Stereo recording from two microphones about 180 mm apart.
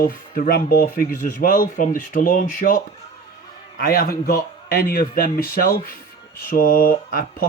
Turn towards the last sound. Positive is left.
turn(degrees=50)  # may be behind; listen again after turning